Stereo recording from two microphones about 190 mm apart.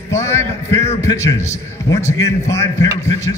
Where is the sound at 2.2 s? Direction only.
15° left (ahead or behind).